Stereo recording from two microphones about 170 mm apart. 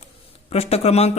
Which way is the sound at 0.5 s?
40° left (ahead or behind).